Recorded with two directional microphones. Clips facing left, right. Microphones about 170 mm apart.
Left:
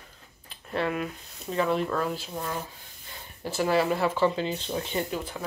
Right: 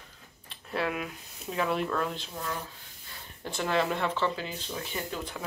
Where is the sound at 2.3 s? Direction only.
20° left (ahead or behind).